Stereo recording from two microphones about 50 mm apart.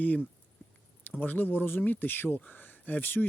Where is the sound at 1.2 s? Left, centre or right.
Left.